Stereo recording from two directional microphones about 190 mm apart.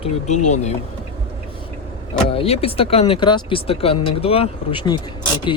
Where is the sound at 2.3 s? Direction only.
30° left (ahead or behind).